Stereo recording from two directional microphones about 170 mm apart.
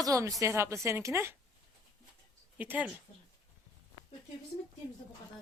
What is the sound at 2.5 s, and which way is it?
Speech, 10° right (ahead or behind).